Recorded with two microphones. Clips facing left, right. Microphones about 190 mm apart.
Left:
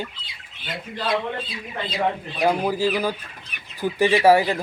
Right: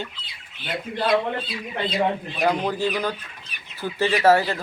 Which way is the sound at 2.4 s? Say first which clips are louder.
Left 2 dB; 10° left (ahead or behind).